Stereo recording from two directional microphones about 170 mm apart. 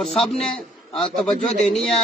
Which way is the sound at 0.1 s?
35° left (ahead or behind).